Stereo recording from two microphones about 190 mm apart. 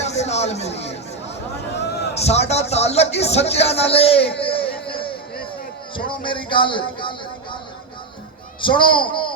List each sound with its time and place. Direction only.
0.0 s a sound: 35° left (ahead or behind)
2.1 s speech: 35° left (ahead or behind)
8.6 s speech: 25° left (ahead or behind)